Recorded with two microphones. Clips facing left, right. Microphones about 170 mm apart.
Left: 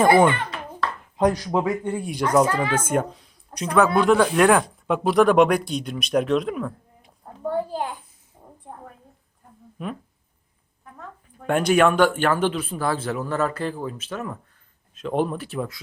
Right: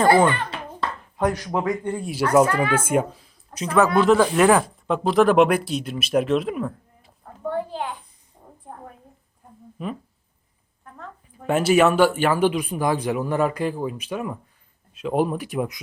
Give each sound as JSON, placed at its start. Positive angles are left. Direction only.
{"t": 0.0, "sound": "speech", "side_deg": 15}
{"t": 7.7, "sound": "a child's voice", "side_deg": 40}
{"t": 8.6, "sound": "a sound", "side_deg": -10}
{"t": 9.7, "sound": "speech", "side_deg": 0}